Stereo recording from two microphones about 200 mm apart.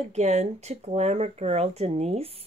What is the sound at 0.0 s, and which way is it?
Speech, 35° right (ahead or behind).